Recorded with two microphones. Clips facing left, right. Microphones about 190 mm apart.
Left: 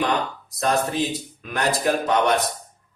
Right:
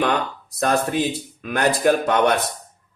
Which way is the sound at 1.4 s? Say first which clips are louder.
Right 4 dB; 55° right (ahead or behind).